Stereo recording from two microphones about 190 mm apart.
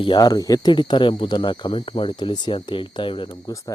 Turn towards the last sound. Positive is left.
turn(degrees=25)  # may be behind; listen again after turning